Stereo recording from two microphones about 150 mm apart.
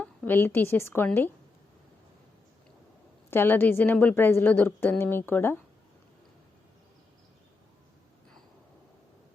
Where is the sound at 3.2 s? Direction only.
15° left (ahead or behind).